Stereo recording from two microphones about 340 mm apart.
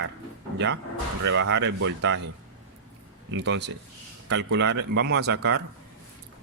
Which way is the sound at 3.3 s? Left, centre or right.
Right.